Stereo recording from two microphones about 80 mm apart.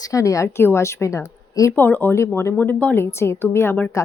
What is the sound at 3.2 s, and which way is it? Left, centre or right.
Speech, left.